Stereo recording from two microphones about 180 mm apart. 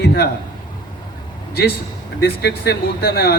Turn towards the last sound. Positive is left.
turn(degrees=55)  # may be behind; listen again after turning